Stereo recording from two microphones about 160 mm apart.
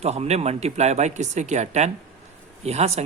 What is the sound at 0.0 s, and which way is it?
Speech, 40° right (ahead or behind).